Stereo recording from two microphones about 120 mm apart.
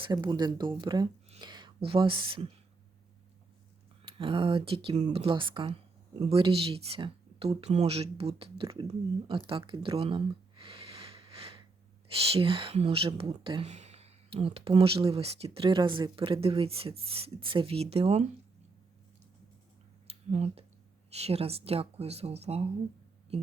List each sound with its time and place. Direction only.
0.0 s speech: 35° right (ahead or behind)
4.0 s speech: 45° right (ahead or behind)
4.9 s speech: 75° right (ahead or behind)
5.2 s speech: 45° right (ahead or behind)
9.5 s a sound: 45° right (ahead or behind)
12.3 s speech: 45° right (ahead or behind)
13.7 s speech: 65° right (ahead or behind)
20.1 s a sound: 60° right (ahead or behind)
21.1 s speech: 60° right (ahead or behind)